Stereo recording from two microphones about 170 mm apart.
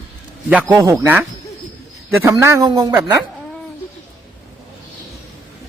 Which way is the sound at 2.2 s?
15° right (ahead or behind).